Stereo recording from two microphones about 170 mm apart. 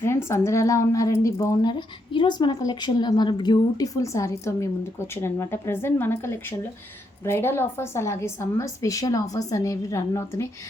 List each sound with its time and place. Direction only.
0.0 s a woman's voice: 15° left (ahead or behind)